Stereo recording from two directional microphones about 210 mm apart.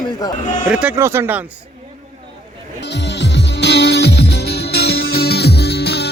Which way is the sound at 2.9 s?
55° left (ahead or behind).